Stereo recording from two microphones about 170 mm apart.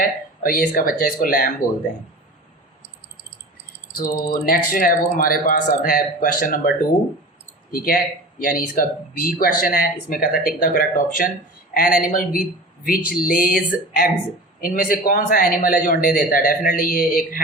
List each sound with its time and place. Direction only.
0.0 s speech: 55° left (ahead or behind)
3.9 s speech: 55° left (ahead or behind)
14.6 s speech: 55° left (ahead or behind)